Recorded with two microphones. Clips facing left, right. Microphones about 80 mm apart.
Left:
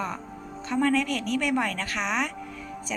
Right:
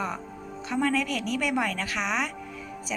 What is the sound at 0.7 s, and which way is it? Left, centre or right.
A woman's voice, centre.